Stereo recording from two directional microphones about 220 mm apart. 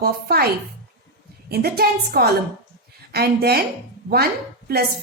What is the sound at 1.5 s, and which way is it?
A woman's voice, 45° right (ahead or behind).